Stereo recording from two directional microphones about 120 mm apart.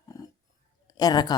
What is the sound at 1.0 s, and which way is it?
Speech, 35° left (ahead or behind).